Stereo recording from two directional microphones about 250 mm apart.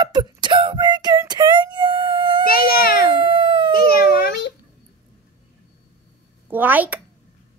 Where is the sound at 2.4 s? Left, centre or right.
Left.